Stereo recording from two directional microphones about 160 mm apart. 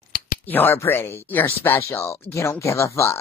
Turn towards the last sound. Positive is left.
turn(degrees=15)  # may be behind; listen again after turning